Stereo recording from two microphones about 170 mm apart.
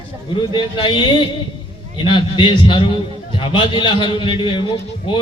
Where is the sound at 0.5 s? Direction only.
30° left (ahead or behind).